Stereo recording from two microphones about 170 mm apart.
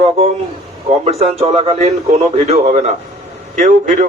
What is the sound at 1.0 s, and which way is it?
A man's voice, 35° right (ahead or behind).